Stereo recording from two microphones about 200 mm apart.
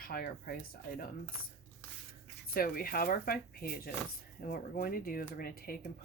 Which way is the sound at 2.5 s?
45° left (ahead or behind).